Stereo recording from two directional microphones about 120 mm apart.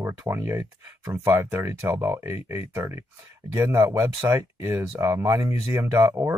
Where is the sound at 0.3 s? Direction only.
20° right (ahead or behind).